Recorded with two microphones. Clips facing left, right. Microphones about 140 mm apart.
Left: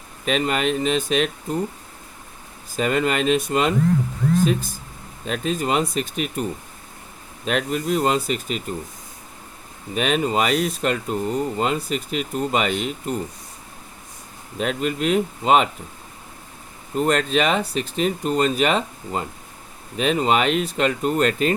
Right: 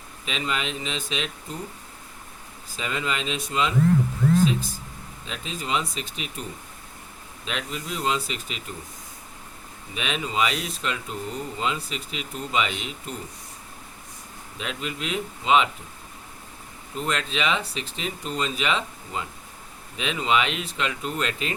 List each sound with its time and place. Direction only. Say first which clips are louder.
0.3 s speech: left 8 dB; 50° left (ahead or behind)
2.7 s speech: left 8 dB; 55° left (ahead or behind)
5.2 s speech: left 11 dB; 50° left (ahead or behind)
7.4 s speech: left 10 dB; 50° left (ahead or behind)
9.9 s speech: left 8 dB; 45° left (ahead or behind)
14.6 s speech: left 9 dB; 50° left (ahead or behind)
16.9 s speech: left 9 dB; 45° left (ahead or behind)